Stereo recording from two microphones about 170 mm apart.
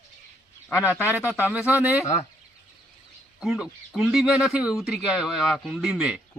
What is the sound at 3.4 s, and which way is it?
Speech, 5° right (ahead or behind).